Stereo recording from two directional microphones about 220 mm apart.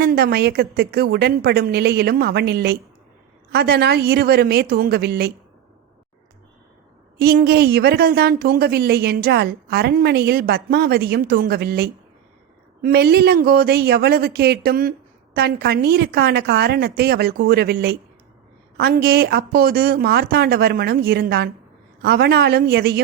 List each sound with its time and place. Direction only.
0.0 s speech: 45° right (ahead or behind)
7.2 s speech: 45° right (ahead or behind)